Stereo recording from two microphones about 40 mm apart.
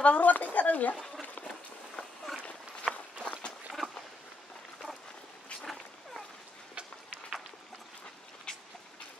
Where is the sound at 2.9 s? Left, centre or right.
Right.